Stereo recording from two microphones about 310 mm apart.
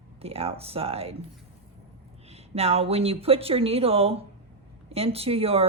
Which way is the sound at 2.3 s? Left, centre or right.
Centre.